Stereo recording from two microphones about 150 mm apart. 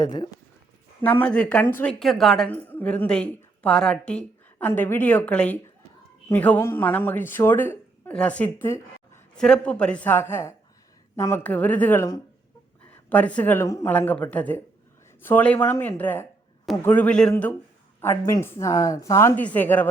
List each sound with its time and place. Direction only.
0.0 s speech: 30° left (ahead or behind)
1.0 s a woman's voice: 10° left (ahead or behind)
9.4 s a woman's voice: 5° left (ahead or behind)
18.0 s a woman's voice: 15° left (ahead or behind)